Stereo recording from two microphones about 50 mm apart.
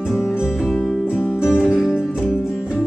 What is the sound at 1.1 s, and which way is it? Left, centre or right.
Music, left.